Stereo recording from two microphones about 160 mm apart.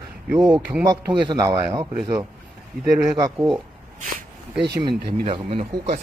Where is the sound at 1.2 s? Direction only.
25° right (ahead or behind).